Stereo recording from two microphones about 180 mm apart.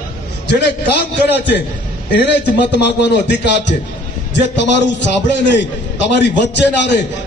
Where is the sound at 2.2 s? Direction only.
75° left (ahead or behind).